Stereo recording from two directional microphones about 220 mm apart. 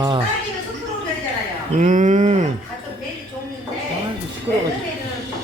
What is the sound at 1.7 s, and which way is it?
Speech, 35° right (ahead or behind).